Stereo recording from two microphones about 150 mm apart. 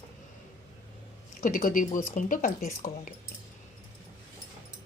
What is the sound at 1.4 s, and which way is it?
Speech, 65° left (ahead or behind).